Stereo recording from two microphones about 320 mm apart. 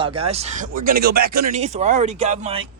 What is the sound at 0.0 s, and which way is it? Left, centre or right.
Speech, centre.